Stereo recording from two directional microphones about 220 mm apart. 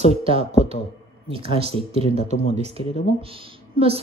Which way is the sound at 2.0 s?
30° left (ahead or behind).